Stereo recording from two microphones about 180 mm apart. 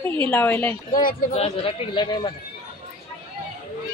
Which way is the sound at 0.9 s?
50° left (ahead or behind).